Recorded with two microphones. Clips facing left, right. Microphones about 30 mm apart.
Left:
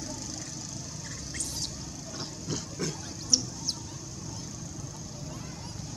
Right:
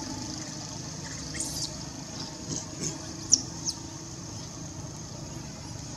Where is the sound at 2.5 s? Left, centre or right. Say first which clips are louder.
Left 3 dB; left.